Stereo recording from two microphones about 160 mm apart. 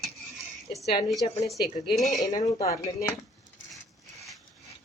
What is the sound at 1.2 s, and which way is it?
Speech, 35° left (ahead or behind).